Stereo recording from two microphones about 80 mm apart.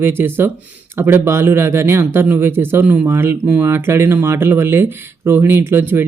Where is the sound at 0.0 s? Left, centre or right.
Right.